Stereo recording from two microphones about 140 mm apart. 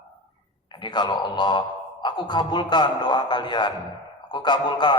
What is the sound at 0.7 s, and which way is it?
A man's voice, 35° left (ahead or behind).